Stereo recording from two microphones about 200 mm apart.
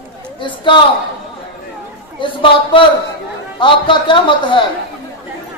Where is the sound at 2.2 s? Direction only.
25° left (ahead or behind).